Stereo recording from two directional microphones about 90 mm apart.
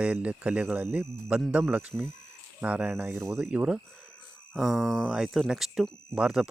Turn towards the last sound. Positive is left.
turn(degrees=-10)  # may be behind; listen again after turning